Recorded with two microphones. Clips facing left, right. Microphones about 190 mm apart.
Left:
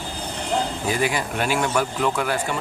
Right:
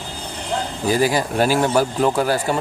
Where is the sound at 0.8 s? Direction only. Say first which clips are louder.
Right 5 dB; 35° right (ahead or behind).